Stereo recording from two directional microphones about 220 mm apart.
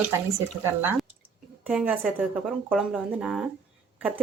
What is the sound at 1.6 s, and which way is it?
Speech, 5° right (ahead or behind).